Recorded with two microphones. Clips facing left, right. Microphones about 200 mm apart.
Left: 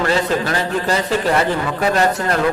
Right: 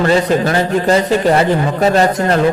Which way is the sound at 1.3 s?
35° right (ahead or behind).